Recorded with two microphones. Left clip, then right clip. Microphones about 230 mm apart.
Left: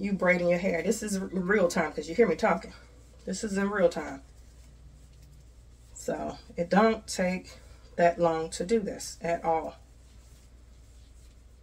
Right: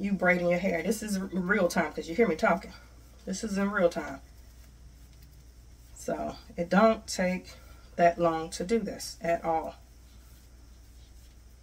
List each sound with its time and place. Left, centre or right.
0.0 s speech: centre
6.0 s speech: centre